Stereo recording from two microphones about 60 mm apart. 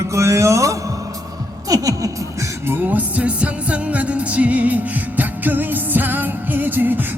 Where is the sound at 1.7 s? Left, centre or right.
Right.